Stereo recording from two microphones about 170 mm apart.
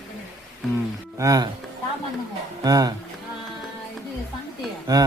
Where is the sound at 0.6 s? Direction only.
Centre (ahead or behind).